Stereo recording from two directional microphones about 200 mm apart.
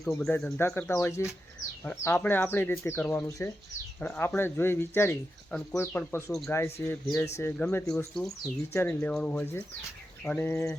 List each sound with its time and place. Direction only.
0.0 s speech: centre (ahead or behind)